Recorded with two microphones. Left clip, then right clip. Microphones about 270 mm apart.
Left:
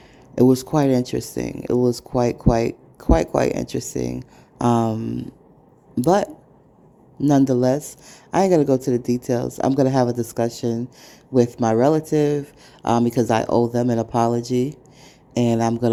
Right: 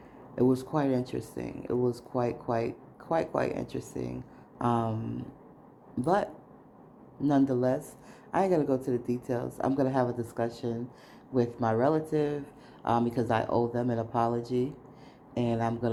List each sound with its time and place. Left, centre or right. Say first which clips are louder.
0.3 s speech: left 10 dB; left